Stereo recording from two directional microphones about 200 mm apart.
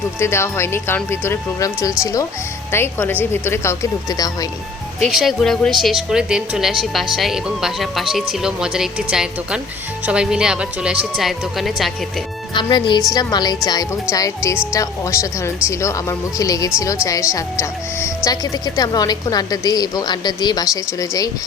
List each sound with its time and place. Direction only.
0.2 s speech: 15° left (ahead or behind)
5.0 s a woman's voice: centre (ahead or behind)
12.5 s a woman's voice: 20° left (ahead or behind)